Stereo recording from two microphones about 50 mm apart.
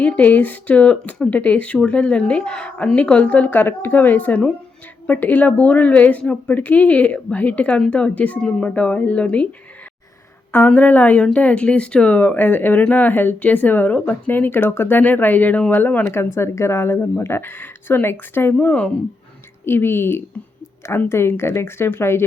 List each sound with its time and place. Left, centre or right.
0.2 s a woman's voice: left; by 2.7 s centre
2.7 s a woman's voice: left
10.8 s a woman's voice: left; by 12.1 s centre
12.1 s a woman's voice: left
16.1 s speech: left
18.6 s a woman's voice: left
19.6 s a woman's voice: left